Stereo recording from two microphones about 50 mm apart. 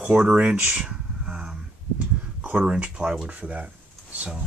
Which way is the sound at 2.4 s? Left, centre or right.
Right.